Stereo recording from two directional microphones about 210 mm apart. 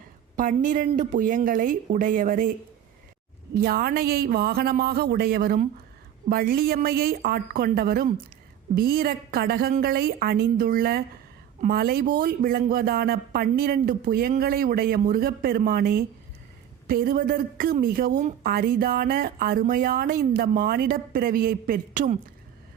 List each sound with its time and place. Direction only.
0.3 s speech: 40° right (ahead or behind)
3.5 s a woman's voice: 45° right (ahead or behind)